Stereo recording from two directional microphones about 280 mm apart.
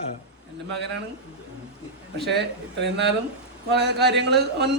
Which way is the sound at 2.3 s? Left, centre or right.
Right.